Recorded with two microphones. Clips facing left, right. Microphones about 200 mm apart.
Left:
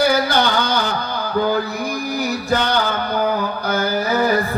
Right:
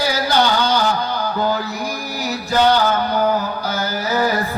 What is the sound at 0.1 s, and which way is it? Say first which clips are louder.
Music: even; 55° left (ahead or behind).